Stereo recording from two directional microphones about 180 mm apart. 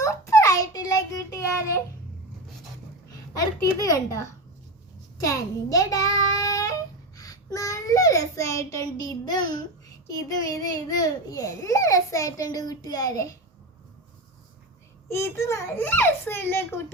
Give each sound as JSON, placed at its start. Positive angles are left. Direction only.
{"t": 0.0, "sound": "a sound", "side_deg": 15}
{"t": 3.3, "sound": "a child's voice", "side_deg": 20}
{"t": 5.2, "sound": "child singing", "side_deg": 20}
{"t": 7.2, "sound": "a child's voice", "side_deg": 20}
{"t": 15.1, "sound": "a child's voice", "side_deg": 15}